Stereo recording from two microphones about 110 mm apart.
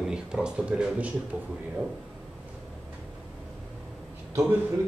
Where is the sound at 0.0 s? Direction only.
5° right (ahead or behind).